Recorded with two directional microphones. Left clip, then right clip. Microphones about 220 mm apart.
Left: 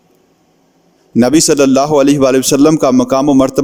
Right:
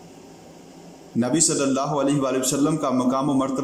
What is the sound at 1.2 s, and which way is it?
A man's voice, 50° left (ahead or behind).